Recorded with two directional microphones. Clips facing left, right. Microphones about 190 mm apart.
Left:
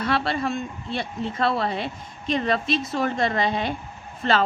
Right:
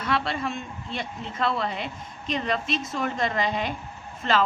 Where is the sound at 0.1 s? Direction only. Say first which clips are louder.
Left 1 dB; 35° left (ahead or behind).